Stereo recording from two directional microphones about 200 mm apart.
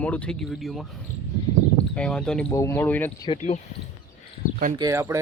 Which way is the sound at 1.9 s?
5° left (ahead or behind).